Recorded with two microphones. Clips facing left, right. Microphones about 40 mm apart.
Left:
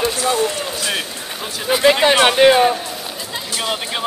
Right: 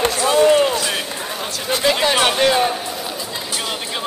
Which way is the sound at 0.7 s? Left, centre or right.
Centre.